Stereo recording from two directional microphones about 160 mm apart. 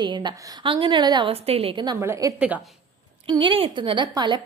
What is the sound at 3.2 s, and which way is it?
A woman's voice, 30° right (ahead or behind).